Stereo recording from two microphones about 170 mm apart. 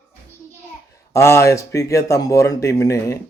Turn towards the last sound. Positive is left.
turn(degrees=20)  # may be behind; listen again after turning